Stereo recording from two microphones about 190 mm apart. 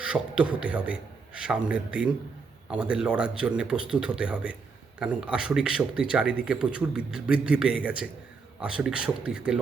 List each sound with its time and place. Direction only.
0.0 s a man's voice: 5° right (ahead or behind)